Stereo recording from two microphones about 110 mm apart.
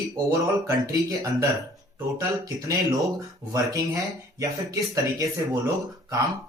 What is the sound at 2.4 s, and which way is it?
Speech, 30° right (ahead or behind).